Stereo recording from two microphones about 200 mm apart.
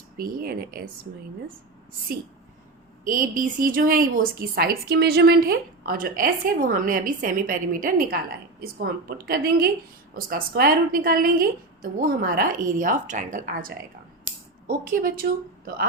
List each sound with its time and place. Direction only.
0.2 s a woman's voice: 45° right (ahead or behind)
3.0 s a woman's voice: 40° right (ahead or behind)